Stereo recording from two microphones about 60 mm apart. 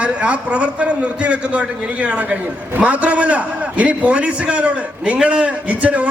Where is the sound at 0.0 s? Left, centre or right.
Centre.